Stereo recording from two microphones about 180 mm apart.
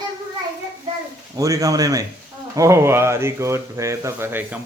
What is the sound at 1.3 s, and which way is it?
Speech, 20° right (ahead or behind).